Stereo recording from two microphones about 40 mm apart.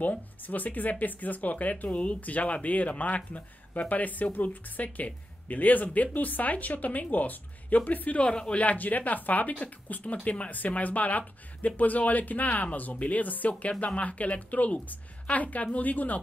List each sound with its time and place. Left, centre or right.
0.0 s speech: left
8.5 s speech: left